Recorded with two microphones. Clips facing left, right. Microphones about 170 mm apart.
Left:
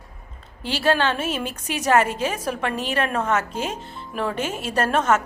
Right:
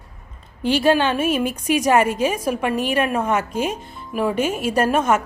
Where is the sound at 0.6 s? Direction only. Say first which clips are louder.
Right 4 dB; 15° right (ahead or behind).